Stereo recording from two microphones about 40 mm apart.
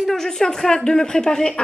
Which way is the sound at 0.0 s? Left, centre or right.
Centre.